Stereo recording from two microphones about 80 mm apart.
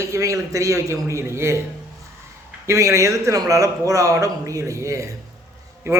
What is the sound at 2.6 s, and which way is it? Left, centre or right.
A man's voice, right.